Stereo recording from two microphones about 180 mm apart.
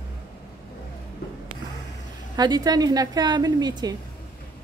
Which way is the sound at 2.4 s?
20° right (ahead or behind).